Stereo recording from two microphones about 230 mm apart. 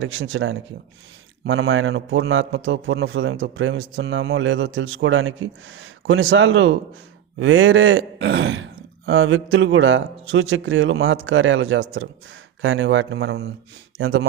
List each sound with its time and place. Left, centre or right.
0.0 s a man's voice: right